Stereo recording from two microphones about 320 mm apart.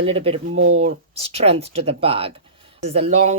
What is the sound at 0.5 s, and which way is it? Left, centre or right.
Speech, right.